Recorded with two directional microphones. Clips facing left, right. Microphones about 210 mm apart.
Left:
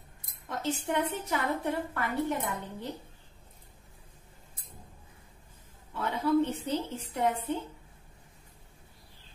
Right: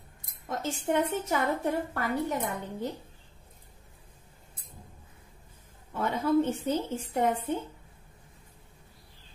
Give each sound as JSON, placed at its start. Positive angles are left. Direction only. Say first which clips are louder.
{"t": 0.5, "sound": "a woman's voice", "louder": "right 2 dB", "side_deg": -45}
{"t": 5.9, "sound": "a woman's voice", "louder": "right 1 dB", "side_deg": -45}